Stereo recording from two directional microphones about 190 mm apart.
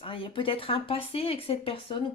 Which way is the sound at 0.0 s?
30° left (ahead or behind).